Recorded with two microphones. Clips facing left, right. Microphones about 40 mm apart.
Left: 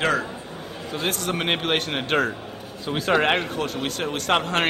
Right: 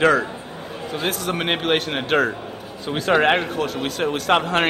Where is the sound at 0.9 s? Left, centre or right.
Centre.